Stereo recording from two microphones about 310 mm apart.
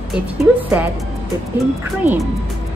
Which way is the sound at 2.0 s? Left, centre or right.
Centre.